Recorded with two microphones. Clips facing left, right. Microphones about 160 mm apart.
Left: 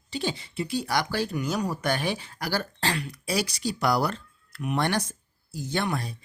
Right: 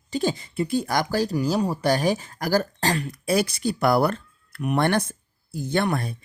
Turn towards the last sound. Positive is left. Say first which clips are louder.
# right 5 dB
turn(degrees=-55)  # may be behind; listen again after turning